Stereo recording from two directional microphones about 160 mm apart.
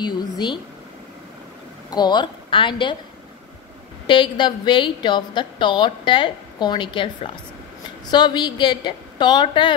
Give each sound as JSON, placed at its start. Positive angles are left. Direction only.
{"t": 0.0, "sound": "speech", "side_deg": 25}
{"t": 1.9, "sound": "a woman's voice", "side_deg": 25}
{"t": 4.1, "sound": "a woman's voice", "side_deg": 30}